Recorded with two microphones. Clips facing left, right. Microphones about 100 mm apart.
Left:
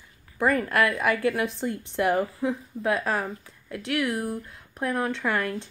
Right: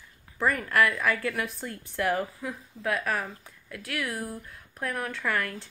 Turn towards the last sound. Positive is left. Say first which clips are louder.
# left 3 dB
turn(degrees=20)  # may be behind; listen again after turning